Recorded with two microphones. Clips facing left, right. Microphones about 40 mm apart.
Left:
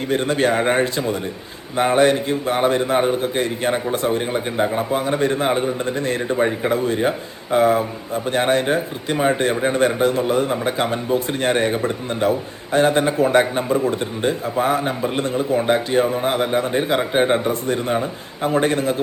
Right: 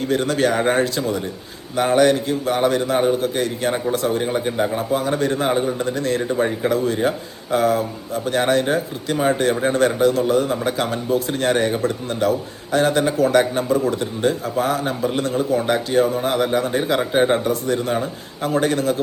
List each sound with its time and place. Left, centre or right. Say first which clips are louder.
0.0 s a man's voice: even; left
4.2 s a man's voice: even; centre
5.5 s speech: even; centre
5.8 s a man's voice: right 1 dB; left
16.8 s speech: even; centre
17.5 s a man's voice: even; left